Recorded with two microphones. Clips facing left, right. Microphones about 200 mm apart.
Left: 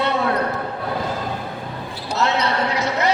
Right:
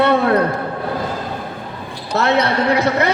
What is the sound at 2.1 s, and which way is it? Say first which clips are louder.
Speech: right 4 dB; 55° right (ahead or behind).